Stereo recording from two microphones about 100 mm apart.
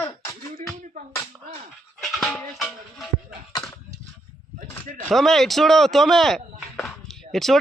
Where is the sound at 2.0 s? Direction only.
5° left (ahead or behind).